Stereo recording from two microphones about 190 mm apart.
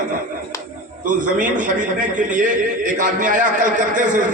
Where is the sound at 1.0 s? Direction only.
45° right (ahead or behind).